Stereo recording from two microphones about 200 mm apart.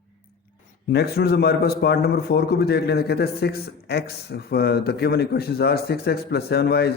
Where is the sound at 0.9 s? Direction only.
55° left (ahead or behind).